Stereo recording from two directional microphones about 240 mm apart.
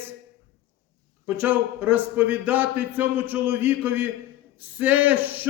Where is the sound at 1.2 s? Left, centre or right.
Centre.